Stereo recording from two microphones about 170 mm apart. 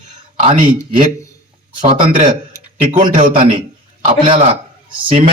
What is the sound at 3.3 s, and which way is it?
A man's voice, 30° right (ahead or behind).